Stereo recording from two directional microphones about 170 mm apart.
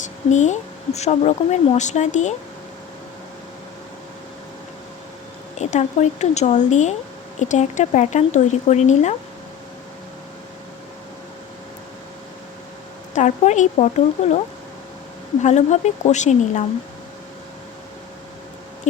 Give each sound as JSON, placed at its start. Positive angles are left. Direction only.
{"t": 0.0, "sound": "speech", "side_deg": 45}
{"t": 5.5, "sound": "speech", "side_deg": 45}
{"t": 13.1, "sound": "speech", "side_deg": 45}
{"t": 15.4, "sound": "speech", "side_deg": 45}